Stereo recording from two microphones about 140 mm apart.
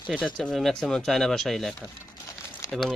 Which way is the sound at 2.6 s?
25° left (ahead or behind).